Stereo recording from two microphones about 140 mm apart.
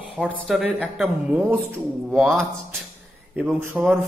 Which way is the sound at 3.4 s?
15° right (ahead or behind).